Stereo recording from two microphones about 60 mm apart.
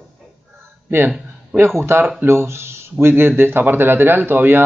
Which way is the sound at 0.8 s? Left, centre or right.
Right.